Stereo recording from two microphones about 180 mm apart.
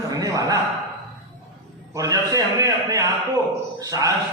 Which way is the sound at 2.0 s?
20° right (ahead or behind).